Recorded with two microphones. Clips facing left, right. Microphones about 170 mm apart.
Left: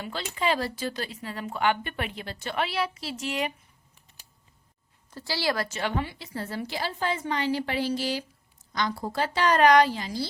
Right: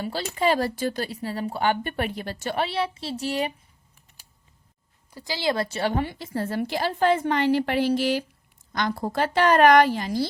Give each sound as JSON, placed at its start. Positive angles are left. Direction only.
{"t": 0.0, "sound": "speech", "side_deg": -40}
{"t": 2.6, "sound": "a woman's voice", "side_deg": -30}
{"t": 5.1, "sound": "a woman's voice", "side_deg": -15}